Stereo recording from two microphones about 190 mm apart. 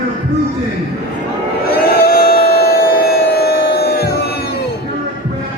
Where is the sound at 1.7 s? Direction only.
50° left (ahead or behind).